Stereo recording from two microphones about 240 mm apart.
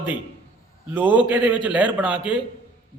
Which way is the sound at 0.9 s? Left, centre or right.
Centre.